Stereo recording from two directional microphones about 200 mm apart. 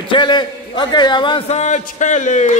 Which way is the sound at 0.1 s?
25° left (ahead or behind).